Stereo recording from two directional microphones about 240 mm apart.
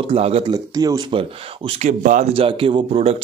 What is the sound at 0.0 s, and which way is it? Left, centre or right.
Speech, right.